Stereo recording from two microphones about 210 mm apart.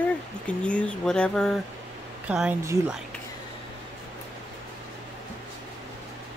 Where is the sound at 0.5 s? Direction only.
5° left (ahead or behind).